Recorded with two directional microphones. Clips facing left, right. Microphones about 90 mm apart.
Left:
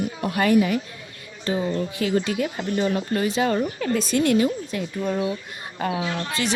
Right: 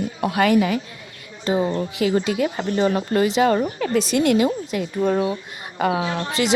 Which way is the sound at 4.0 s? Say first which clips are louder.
Right 3 dB; 65° right (ahead or behind).